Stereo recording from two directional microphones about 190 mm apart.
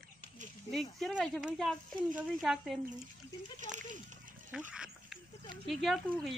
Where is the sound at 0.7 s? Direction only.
Centre (ahead or behind).